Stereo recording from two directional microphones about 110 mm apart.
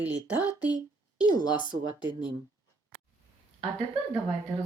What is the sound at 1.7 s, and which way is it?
Speech, 45° right (ahead or behind).